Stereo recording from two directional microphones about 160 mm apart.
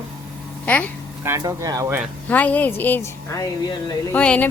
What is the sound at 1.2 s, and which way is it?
Speech, 20° right (ahead or behind).